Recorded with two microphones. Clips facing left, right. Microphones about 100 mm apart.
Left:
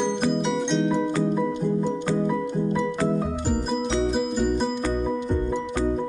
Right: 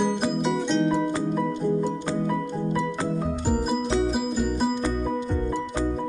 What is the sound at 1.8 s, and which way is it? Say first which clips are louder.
Music: left 2 dB; 15° right (ahead or behind).